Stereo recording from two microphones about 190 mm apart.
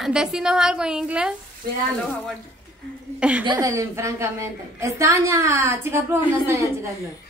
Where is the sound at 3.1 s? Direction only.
5° right (ahead or behind).